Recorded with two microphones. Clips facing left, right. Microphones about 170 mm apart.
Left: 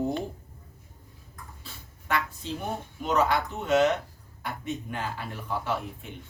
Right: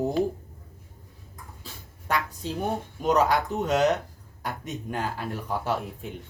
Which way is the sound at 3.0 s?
40° right (ahead or behind).